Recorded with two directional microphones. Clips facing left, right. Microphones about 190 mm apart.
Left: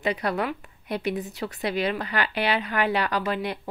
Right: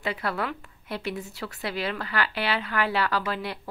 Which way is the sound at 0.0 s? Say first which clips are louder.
Left 4 dB; 20° left (ahead or behind).